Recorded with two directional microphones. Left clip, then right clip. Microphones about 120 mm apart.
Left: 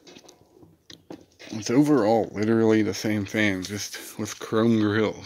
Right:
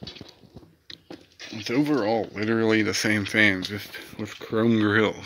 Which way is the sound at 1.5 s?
60° left (ahead or behind).